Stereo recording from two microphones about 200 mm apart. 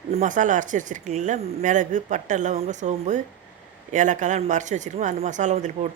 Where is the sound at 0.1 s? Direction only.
40° right (ahead or behind).